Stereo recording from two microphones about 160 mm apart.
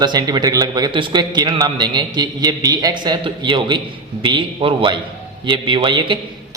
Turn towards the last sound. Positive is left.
turn(degrees=-30)  # may be behind; listen again after turning